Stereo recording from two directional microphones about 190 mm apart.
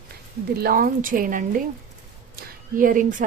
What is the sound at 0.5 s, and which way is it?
A woman's voice, 55° right (ahead or behind).